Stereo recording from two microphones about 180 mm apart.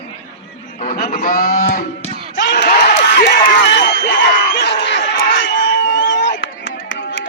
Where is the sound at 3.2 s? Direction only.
70° left (ahead or behind).